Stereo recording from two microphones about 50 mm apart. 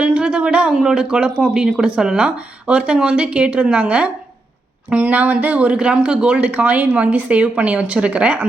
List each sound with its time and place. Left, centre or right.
0.0 s speech: right
0.7 s speech: centre
1.0 s speech: right